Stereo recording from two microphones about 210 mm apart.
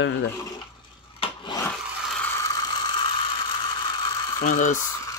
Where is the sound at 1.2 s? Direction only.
25° left (ahead or behind).